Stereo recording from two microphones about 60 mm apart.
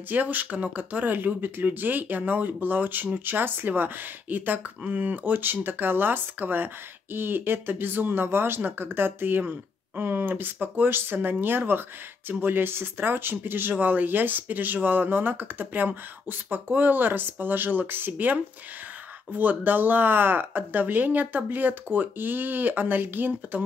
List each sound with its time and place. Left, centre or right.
0.1 s speech: right